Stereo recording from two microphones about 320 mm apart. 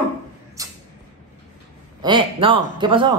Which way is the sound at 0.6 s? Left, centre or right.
Centre.